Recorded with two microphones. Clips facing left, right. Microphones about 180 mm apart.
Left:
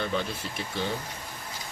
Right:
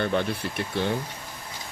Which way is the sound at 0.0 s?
60° right (ahead or behind).